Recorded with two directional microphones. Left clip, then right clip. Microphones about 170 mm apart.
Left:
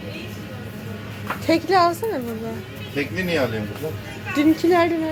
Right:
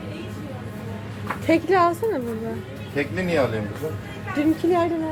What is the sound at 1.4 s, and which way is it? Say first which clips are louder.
Speech: left 1 dB; 5° right (ahead or behind).